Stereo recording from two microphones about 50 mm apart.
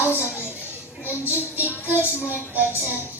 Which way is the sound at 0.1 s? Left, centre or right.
Left.